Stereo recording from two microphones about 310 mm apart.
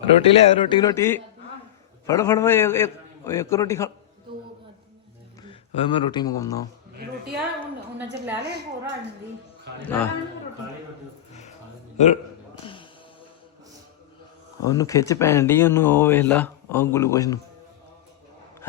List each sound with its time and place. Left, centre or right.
0.0 s speech: centre
5.4 s speech: centre
8.4 s a woman's voice: right
9.8 s a man's voice: centre
11.9 s a man's voice: left
12.6 s a sound: centre
14.6 s speech: centre